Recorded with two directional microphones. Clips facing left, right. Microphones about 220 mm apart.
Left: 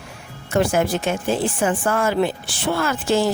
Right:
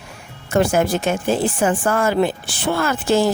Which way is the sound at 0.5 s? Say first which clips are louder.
Right 2 dB; 40° right (ahead or behind).